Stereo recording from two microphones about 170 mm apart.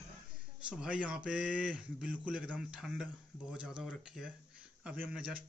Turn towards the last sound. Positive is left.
turn(degrees=-5)  # may be behind; listen again after turning